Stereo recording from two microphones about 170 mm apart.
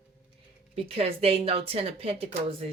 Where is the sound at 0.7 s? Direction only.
35° right (ahead or behind).